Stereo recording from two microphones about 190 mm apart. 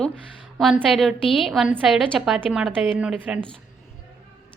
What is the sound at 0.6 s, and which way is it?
A woman's voice, centre (ahead or behind).